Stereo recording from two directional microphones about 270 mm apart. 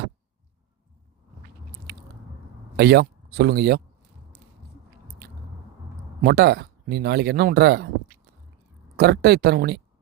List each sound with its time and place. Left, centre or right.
2.7 s speech: right
6.2 s speech: right